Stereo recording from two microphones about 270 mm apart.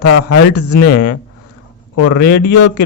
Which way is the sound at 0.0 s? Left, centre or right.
Left.